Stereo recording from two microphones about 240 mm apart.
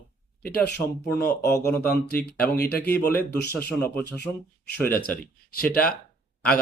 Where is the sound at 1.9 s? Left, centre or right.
Left.